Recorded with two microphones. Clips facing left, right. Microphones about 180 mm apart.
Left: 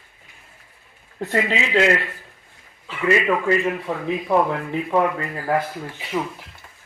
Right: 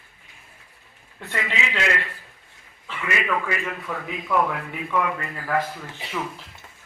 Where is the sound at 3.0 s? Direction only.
30° left (ahead or behind).